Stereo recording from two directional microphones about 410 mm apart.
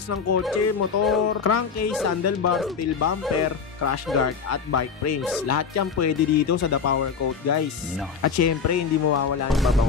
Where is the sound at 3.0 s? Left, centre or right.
Left.